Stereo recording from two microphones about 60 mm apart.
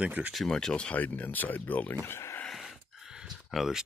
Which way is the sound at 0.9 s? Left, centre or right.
Left.